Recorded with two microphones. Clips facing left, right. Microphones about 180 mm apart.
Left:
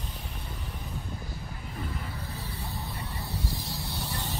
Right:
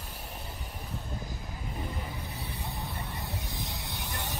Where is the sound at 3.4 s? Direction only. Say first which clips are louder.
Left 3 dB; 20° right (ahead or behind).